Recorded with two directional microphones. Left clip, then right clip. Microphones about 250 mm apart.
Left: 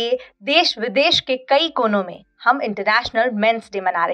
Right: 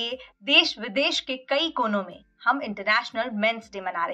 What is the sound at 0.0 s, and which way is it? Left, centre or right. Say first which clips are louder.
Speech: left 10 dB; left.